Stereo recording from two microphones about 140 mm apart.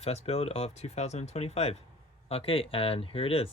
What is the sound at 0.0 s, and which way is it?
Speech, 45° left (ahead or behind).